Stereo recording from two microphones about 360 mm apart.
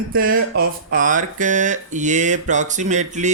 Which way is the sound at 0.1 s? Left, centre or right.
Right.